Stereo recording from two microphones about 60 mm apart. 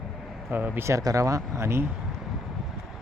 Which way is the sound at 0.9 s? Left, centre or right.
Right.